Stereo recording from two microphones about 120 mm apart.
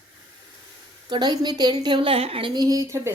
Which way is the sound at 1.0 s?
35° right (ahead or behind).